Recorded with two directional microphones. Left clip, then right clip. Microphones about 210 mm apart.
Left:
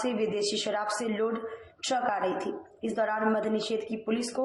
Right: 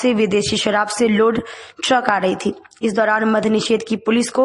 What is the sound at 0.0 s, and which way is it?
Speech, 40° right (ahead or behind).